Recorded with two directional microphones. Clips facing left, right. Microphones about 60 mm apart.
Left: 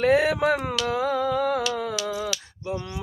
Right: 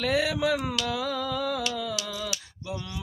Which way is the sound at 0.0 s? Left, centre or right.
Left.